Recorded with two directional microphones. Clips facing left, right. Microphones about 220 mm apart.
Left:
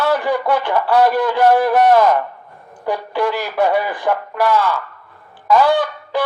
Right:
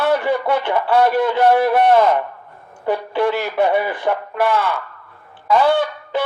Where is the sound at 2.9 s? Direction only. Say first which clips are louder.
Right 1 dB; 25° right (ahead or behind).